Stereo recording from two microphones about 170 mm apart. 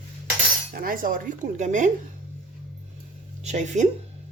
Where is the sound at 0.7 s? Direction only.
55° right (ahead or behind).